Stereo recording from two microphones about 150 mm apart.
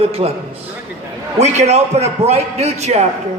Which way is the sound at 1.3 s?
45° right (ahead or behind).